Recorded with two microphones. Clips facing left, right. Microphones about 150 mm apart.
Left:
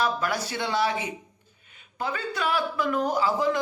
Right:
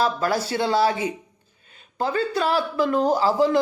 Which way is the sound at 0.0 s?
30° right (ahead or behind).